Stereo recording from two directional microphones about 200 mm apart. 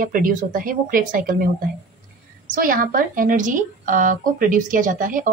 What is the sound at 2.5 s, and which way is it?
A woman's voice, 45° right (ahead or behind).